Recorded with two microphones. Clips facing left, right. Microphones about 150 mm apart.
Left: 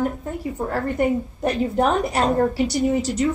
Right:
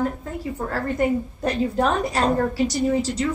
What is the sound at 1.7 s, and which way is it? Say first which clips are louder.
Speech: left 2 dB; 15° left (ahead or behind).